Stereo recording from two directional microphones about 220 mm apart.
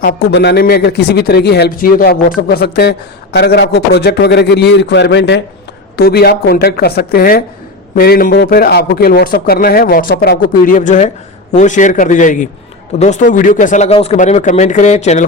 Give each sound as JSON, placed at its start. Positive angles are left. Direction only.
{"t": 0.0, "sound": "a man's voice", "side_deg": 40}